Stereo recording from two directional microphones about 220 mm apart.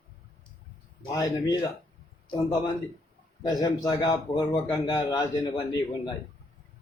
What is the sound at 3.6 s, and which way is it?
A man's voice, 15° left (ahead or behind).